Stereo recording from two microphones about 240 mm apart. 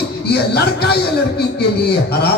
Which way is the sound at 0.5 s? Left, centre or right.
Left.